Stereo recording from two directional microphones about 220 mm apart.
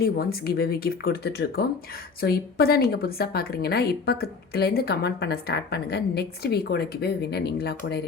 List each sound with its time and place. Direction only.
0.0 s a woman's voice: 45° left (ahead or behind)